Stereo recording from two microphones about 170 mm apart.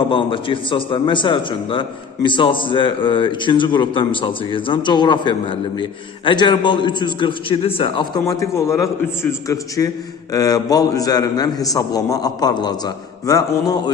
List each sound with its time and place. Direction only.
0.1 s a man's voice: 30° left (ahead or behind)